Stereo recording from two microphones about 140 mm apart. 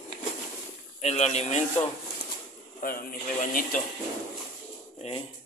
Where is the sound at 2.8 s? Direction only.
90° left.